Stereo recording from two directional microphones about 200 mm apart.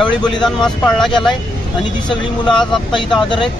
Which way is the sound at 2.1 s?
25° left (ahead or behind).